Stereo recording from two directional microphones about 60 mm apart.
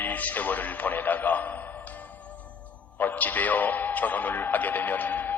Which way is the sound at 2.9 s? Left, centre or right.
Left.